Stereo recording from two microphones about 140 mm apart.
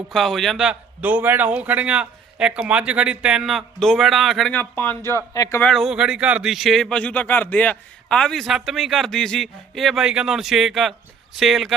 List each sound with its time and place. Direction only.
0.1 s a man's voice: centre (ahead or behind)
4.5 s speech: 15° left (ahead or behind)
5.6 s speech: centre (ahead or behind)